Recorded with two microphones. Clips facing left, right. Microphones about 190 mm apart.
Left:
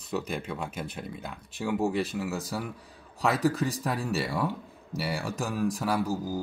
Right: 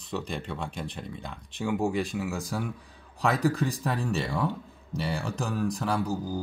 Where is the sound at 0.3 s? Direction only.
5° left (ahead or behind).